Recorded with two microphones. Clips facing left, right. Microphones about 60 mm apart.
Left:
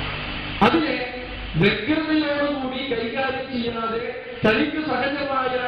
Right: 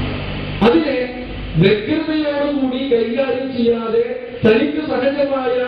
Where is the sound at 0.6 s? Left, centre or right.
Centre.